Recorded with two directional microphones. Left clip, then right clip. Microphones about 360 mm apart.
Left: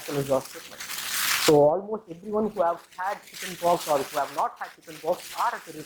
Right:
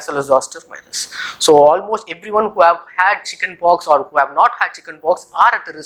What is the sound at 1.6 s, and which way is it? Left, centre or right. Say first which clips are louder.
Speech: right 11 dB; centre.